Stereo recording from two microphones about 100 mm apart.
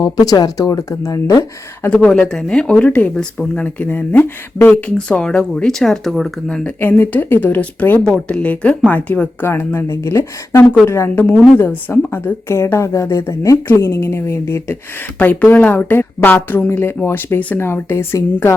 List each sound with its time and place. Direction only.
0.0 s speech: 40° left (ahead or behind)
1.9 s speech: 10° left (ahead or behind)
6.7 s speech: 20° left (ahead or behind)
9.5 s a woman's voice: 25° left (ahead or behind)
15.2 s a woman's voice: 15° left (ahead or behind)